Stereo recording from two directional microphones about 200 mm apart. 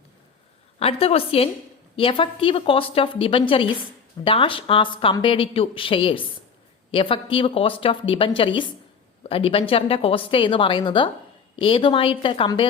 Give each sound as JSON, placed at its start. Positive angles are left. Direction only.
{"t": 0.8, "sound": "a woman's voice", "side_deg": 30}